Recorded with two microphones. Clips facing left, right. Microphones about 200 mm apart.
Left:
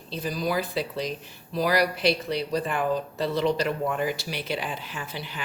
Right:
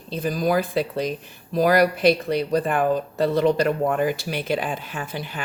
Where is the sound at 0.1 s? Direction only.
50° right (ahead or behind).